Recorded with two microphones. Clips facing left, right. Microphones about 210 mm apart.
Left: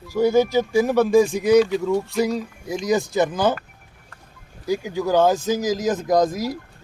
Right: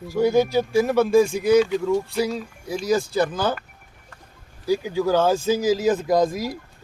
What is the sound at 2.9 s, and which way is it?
Speech, 20° left (ahead or behind).